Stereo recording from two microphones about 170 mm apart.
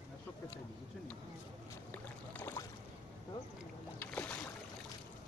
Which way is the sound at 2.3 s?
15° left (ahead or behind).